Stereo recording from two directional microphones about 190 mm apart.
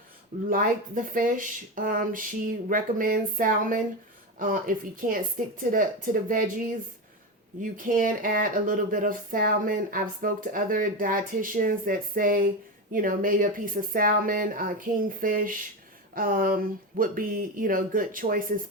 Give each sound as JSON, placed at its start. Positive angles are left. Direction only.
{"t": 0.5, "sound": "speech", "side_deg": -45}
{"t": 7.6, "sound": "speech", "side_deg": -45}